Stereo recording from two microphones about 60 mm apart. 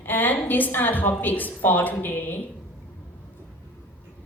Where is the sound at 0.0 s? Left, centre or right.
Left.